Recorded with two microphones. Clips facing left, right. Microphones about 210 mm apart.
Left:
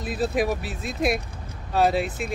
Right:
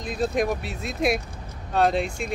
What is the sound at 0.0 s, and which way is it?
Speech, 5° left (ahead or behind).